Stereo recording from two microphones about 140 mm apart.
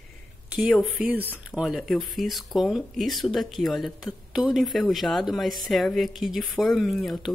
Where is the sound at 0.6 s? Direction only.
5° right (ahead or behind).